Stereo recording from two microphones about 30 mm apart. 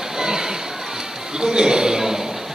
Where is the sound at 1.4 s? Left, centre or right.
Right.